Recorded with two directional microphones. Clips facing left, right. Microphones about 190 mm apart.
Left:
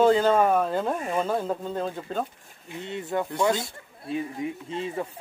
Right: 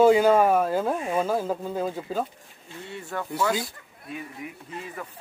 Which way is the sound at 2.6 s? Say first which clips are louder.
Left 5 dB; 20° left (ahead or behind).